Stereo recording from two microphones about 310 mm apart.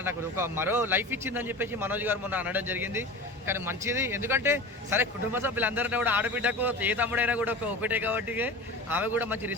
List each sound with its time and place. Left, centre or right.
0.0 s a man's voice: centre